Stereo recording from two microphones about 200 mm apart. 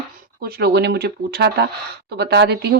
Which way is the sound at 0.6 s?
55° right (ahead or behind).